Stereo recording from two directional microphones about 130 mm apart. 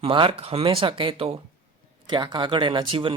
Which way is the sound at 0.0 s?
45° right (ahead or behind).